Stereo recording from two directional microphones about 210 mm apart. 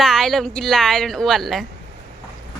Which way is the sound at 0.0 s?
Centre (ahead or behind).